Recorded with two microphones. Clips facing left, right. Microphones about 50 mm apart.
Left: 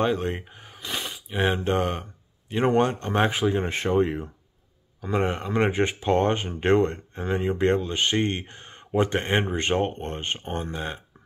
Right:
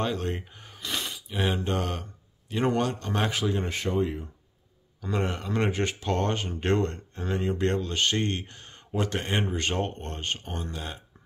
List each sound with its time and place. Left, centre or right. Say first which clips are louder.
0.0 s a sound: left 5 dB; left
1.3 s speech: left 5 dB; centre
3.7 s speech: left 5 dB; left
5.0 s speech: left 4 dB; left